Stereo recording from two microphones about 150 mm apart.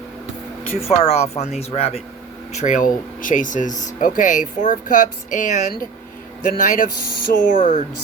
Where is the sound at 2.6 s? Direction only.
55° left (ahead or behind).